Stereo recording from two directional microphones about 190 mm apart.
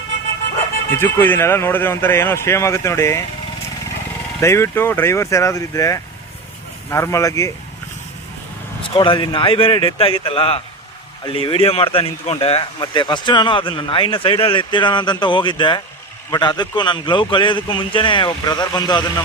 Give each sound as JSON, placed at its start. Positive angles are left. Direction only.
{"t": 0.9, "sound": "speech", "side_deg": 10}
{"t": 4.4, "sound": "speech", "side_deg": 15}
{"t": 8.9, "sound": "speech", "side_deg": 25}